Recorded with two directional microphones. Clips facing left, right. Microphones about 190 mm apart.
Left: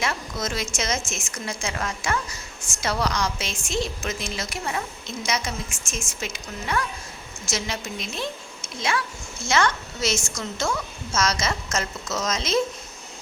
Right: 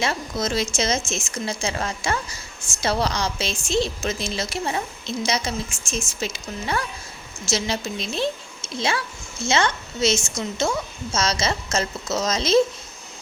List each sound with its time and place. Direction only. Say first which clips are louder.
0.0 s a woman's voice: right 3 dB; 30° right (ahead or behind)
9.5 s a woman's voice: right 1 dB; 25° right (ahead or behind)